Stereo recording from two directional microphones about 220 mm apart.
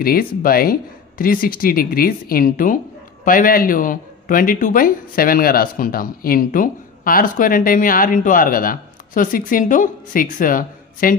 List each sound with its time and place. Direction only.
0.0 s a man's voice: 40° left (ahead or behind)